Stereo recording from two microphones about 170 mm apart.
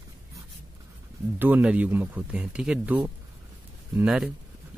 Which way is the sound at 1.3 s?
10° right (ahead or behind).